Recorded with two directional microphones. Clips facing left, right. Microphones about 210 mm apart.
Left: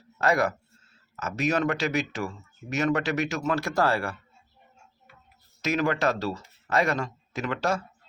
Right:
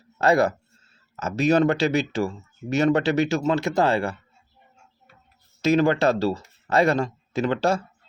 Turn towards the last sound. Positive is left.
turn(degrees=-30)  # may be behind; listen again after turning